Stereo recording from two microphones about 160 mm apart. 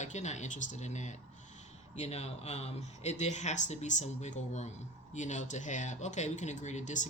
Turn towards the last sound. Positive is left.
turn(degrees=50)  # may be behind; listen again after turning